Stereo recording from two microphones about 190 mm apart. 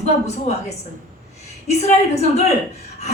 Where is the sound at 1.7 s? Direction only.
35° left (ahead or behind).